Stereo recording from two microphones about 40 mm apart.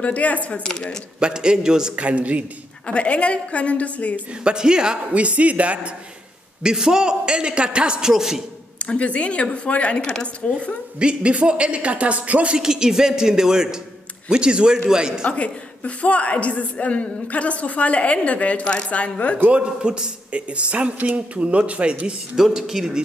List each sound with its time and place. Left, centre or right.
0.0 s a woman's voice: left
1.2 s a man's voice: centre
2.0 s a man's voice: right
2.9 s a woman's voice: left
4.5 s a man's voice: centre
5.1 s a man's voice: right
6.6 s a man's voice: centre
8.1 s speech: centre
8.7 s a woman's voice: left
11.0 s a man's voice: right
12.5 s a man's voice: centre
15.2 s a woman's voice: left
19.5 s a man's voice: right
22.4 s speech: centre